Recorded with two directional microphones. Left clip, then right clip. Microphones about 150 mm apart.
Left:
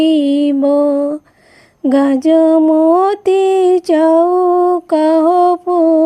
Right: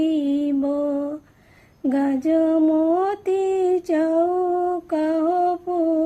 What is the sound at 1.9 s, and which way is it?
Female singing, 60° left (ahead or behind).